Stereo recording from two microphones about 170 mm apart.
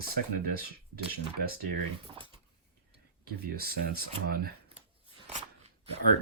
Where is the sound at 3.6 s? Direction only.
65° right (ahead or behind).